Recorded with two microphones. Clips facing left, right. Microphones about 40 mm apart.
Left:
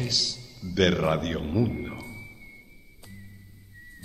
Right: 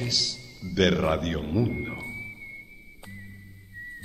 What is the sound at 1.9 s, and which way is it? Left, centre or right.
Music, right.